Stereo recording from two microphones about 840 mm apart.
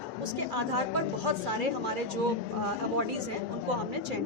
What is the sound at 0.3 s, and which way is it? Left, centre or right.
A woman's voice, right.